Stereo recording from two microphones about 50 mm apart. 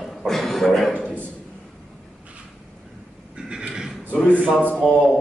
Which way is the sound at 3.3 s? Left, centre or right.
Centre.